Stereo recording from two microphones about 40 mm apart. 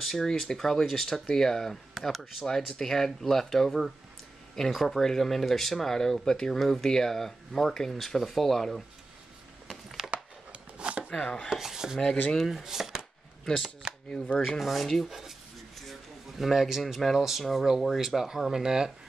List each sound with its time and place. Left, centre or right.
0.0 s speech: centre
2.0 s speech: centre
2.4 s speech: centre
10.1 s chopping: right
11.1 s speech: left
11.4 s speech: centre
12.4 s speech: centre
13.8 s a sound: right
14.6 s speech: centre
15.7 s a sound: centre
16.8 s speech: centre